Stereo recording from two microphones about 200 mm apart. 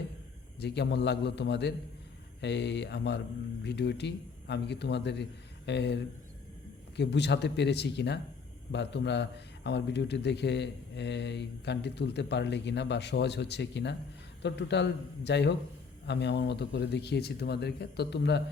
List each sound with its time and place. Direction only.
0.6 s a man's voice: 60° left (ahead or behind)